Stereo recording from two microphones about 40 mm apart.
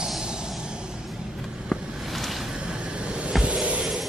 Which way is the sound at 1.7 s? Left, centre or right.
Centre.